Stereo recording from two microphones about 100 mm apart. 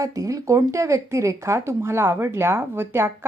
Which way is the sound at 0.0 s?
35° right (ahead or behind).